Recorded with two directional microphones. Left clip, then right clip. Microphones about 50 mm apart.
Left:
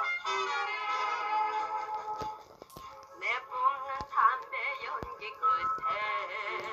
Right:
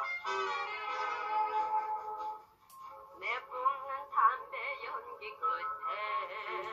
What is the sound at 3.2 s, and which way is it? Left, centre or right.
Synthetic singing, left.